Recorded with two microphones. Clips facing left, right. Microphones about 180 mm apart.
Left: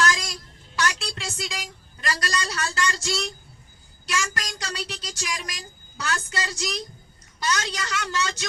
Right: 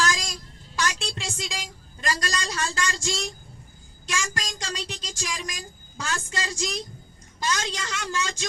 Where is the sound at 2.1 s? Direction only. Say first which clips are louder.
Left 1 dB; 25° right (ahead or behind).